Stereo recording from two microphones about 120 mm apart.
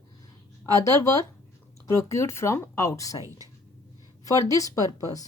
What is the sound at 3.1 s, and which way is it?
Speech, 25° right (ahead or behind).